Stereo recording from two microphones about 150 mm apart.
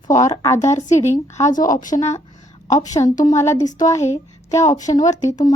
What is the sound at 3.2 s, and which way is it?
A woman's voice, 20° left (ahead or behind).